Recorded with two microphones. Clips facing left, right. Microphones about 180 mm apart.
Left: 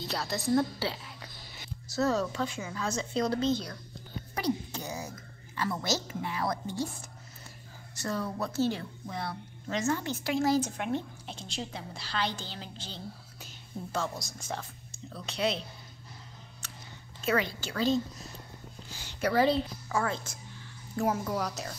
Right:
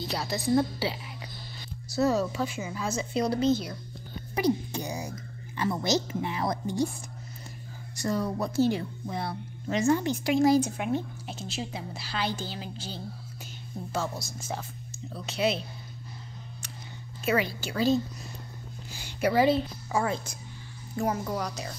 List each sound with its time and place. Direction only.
0.3 s speech: centre (ahead or behind); by 6.9 s 20° right (ahead or behind)
7.9 s speech: 15° right (ahead or behind)
17.2 s speech: 10° right (ahead or behind)
20.9 s speech: centre (ahead or behind)